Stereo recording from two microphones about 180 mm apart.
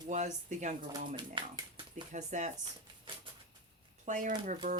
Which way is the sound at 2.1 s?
40° right (ahead or behind).